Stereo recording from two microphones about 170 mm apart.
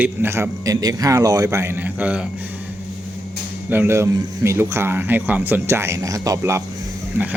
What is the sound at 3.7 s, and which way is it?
A man's voice, 15° right (ahead or behind).